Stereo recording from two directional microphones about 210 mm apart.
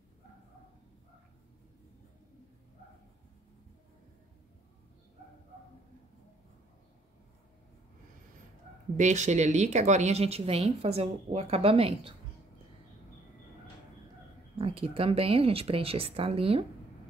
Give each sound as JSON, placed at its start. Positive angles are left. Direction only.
{"t": 8.9, "sound": "speech", "side_deg": -35}
{"t": 14.6, "sound": "speech", "side_deg": -25}